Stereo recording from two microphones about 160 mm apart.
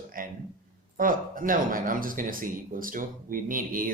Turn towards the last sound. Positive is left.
turn(degrees=-60)  # may be behind; listen again after turning